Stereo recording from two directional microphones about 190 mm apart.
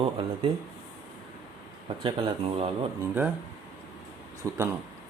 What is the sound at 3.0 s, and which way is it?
Speech, 10° right (ahead or behind).